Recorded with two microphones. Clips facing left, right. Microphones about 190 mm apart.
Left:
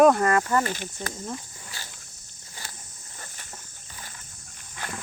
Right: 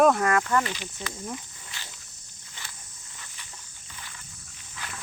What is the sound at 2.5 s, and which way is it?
Cricket, 40° left (ahead or behind).